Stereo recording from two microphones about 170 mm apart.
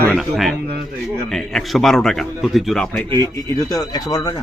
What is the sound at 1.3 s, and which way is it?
A man's voice, centre (ahead or behind).